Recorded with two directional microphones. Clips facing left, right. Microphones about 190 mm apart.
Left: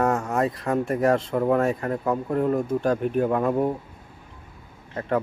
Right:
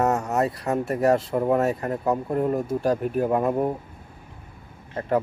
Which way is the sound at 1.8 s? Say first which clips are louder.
Even; 25° right (ahead or behind).